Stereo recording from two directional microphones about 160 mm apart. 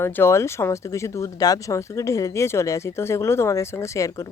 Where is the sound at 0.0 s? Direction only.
15° left (ahead or behind).